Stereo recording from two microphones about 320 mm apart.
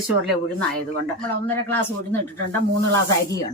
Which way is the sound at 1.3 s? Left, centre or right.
Centre.